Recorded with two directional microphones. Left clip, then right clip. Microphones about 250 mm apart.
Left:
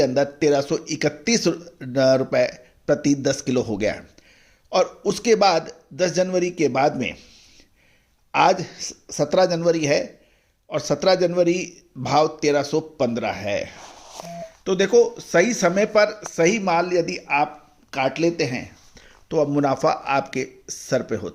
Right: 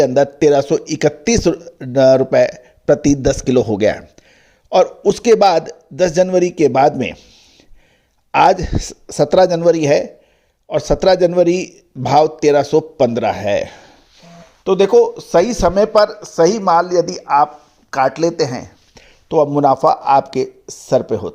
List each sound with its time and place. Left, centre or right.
0.0 s speech: right
8.3 s speech: right
14.6 s speech: centre
15.8 s speech: centre
16.8 s speech: centre
17.2 s speech: centre
17.9 s speech: right